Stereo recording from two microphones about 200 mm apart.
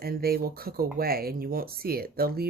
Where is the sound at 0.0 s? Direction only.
50° right (ahead or behind).